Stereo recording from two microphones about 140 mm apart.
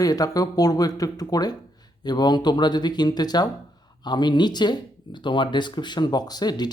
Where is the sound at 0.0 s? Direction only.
25° left (ahead or behind).